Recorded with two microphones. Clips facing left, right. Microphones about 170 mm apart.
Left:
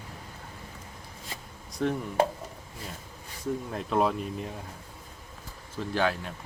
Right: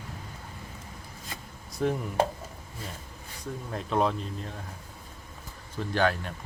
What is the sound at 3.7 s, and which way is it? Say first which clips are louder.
Speech: right 1 dB; centre (ahead or behind).